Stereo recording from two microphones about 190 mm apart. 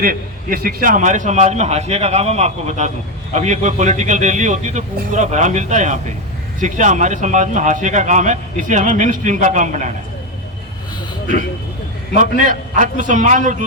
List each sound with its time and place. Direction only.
0.0 s a man's voice: 50° right (ahead or behind)
12.5 s a man's voice: 40° right (ahead or behind)